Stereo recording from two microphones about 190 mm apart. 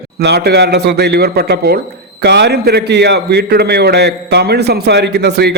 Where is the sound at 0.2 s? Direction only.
60° right (ahead or behind).